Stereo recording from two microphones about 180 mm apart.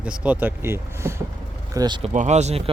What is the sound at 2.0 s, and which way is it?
Speech, 40° right (ahead or behind).